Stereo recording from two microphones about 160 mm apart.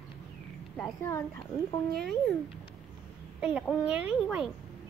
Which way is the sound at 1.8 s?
80° right.